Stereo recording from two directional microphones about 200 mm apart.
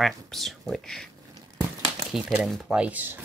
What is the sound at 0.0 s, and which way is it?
Speech, centre (ahead or behind).